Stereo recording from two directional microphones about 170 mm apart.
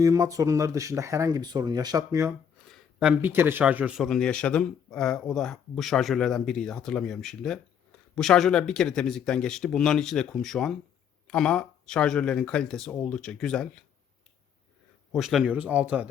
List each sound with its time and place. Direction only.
0.0 s speech: 20° right (ahead or behind)
2.6 s speech: 5° right (ahead or behind)
15.1 s speech: centre (ahead or behind)